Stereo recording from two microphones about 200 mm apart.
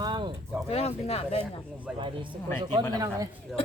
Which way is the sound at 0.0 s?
25° right (ahead or behind).